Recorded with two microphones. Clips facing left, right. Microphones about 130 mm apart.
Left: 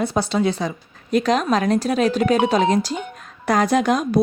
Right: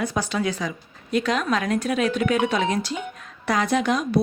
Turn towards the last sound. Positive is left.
turn(degrees=45)  # may be behind; listen again after turning